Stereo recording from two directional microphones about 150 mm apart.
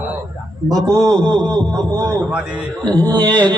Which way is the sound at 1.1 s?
5° left (ahead or behind).